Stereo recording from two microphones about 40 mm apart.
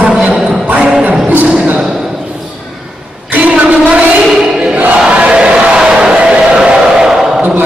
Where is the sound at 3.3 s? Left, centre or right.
Right.